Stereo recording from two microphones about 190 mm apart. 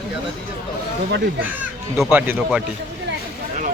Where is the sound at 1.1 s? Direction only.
70° right (ahead or behind).